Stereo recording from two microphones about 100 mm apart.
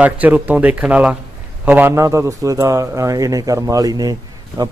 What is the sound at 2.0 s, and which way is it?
Speech, 30° right (ahead or behind).